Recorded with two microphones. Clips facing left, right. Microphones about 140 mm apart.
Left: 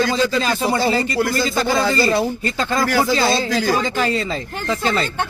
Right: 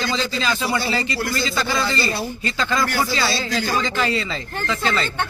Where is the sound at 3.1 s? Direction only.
50° left (ahead or behind).